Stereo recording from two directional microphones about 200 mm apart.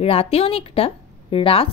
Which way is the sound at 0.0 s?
30° left (ahead or behind).